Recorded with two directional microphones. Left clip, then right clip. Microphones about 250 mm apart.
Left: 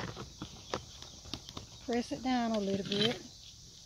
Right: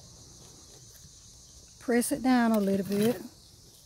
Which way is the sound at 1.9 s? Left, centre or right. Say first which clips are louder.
Right 8 dB; right.